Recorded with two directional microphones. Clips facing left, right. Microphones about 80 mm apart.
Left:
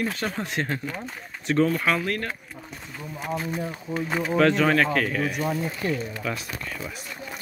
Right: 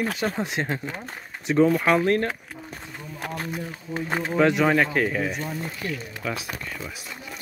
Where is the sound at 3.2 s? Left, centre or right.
Right.